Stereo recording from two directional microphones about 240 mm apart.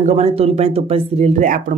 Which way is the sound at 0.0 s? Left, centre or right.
Right.